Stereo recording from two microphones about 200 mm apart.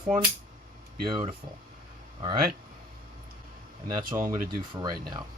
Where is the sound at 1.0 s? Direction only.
25° right (ahead or behind).